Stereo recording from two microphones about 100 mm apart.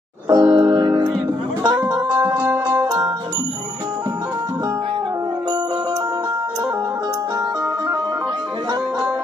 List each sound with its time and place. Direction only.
0.3 s music: 45° right (ahead or behind)